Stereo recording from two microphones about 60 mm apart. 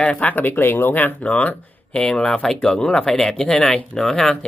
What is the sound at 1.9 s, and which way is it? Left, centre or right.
Speech, centre.